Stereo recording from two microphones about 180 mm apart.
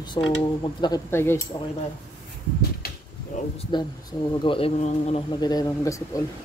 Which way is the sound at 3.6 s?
25° left (ahead or behind).